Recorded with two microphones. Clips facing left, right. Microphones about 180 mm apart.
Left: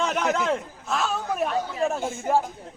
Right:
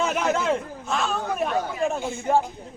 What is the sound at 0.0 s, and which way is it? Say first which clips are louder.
Speech: right 1 dB; 5° right (ahead or behind).